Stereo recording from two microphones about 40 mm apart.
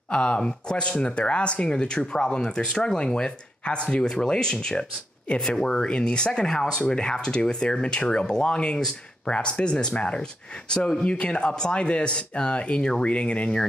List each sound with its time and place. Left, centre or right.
0.1 s speech: left